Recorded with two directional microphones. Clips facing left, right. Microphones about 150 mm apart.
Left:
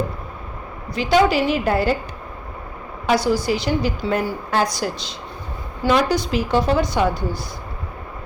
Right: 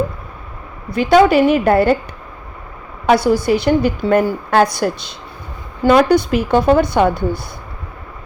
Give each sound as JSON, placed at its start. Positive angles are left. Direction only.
{"t": 0.9, "sound": "a woman's voice", "side_deg": -55}
{"t": 3.1, "sound": "a woman's voice", "side_deg": -55}